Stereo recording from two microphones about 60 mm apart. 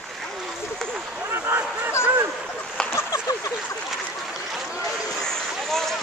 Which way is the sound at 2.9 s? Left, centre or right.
Left.